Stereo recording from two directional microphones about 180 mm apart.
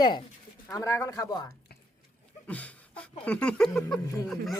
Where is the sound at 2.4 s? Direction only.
10° left (ahead or behind).